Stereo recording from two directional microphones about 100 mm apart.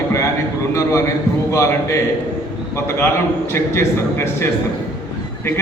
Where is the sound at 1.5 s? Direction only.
30° left (ahead or behind).